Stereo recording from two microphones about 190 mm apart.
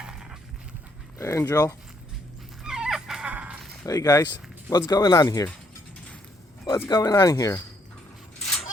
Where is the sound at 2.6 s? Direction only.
5° right (ahead or behind).